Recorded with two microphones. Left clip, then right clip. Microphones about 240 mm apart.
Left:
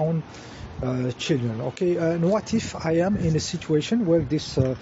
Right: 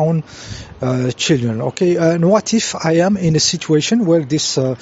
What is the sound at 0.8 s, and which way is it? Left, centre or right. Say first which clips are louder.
Speech: right 9 dB; right.